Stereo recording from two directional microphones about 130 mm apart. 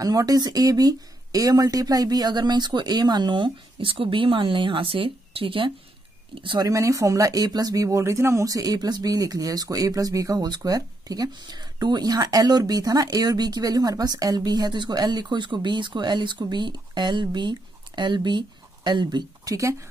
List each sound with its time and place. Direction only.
0.0 s speech: 30° right (ahead or behind)
6.7 s speech: 25° right (ahead or behind)